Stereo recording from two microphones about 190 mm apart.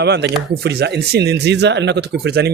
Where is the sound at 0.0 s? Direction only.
60° right (ahead or behind).